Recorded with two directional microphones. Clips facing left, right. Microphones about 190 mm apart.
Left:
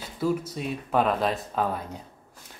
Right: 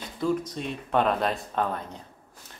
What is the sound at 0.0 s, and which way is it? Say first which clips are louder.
Speech: even; 5° left (ahead or behind).